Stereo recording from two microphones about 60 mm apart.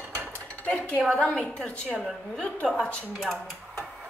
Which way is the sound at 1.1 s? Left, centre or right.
Centre.